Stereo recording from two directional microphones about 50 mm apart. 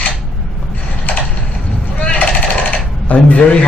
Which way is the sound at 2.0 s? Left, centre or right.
Left.